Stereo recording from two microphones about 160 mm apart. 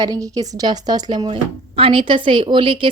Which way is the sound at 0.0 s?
25° right (ahead or behind).